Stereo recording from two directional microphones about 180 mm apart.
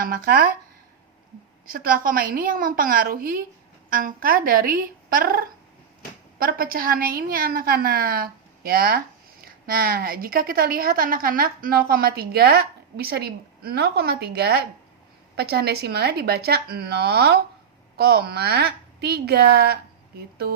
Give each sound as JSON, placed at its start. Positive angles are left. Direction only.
{"t": 0.0, "sound": "a woman's voice", "side_deg": -55}
{"t": 1.6, "sound": "a woman's voice", "side_deg": -50}